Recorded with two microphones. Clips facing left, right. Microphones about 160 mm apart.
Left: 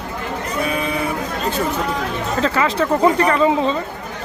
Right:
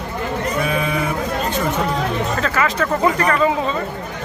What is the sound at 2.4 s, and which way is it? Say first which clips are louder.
Speech: left 5 dB; 25° left (ahead or behind).